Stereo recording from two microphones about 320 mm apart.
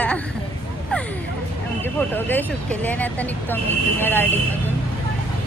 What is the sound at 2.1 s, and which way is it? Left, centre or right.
Speech, centre.